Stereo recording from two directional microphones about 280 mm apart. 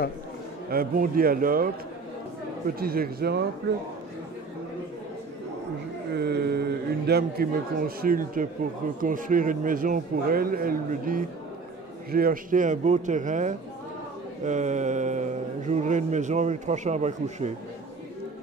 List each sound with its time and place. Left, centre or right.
0.7 s a man's voice: right
2.8 s a man's voice: right
6.1 s a sound: right
8.0 s a man's voice: right